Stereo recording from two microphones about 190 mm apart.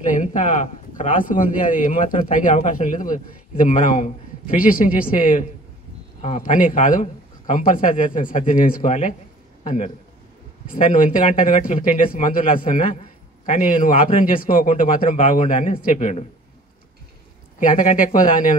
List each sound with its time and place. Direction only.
0.0 s a man's voice: 40° left (ahead or behind)
17.6 s a man's voice: 45° left (ahead or behind)